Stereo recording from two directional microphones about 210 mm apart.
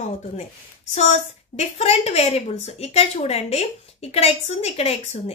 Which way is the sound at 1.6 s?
30° left (ahead or behind).